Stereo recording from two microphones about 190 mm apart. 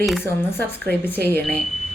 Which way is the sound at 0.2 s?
10° left (ahead or behind).